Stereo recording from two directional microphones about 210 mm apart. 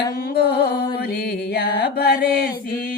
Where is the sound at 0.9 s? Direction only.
50° left (ahead or behind).